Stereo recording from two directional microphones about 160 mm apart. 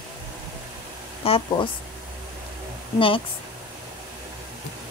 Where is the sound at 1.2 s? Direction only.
35° left (ahead or behind).